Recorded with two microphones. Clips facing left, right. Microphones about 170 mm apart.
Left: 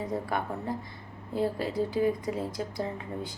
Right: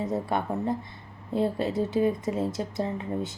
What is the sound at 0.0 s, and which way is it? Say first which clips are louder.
A woman's voice: right 3 dB; 25° right (ahead or behind).